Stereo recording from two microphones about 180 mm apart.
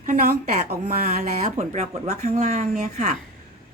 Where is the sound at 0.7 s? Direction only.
60° right (ahead or behind).